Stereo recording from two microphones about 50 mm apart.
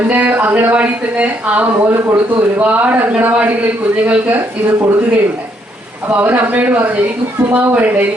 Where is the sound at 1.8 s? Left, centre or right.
Right.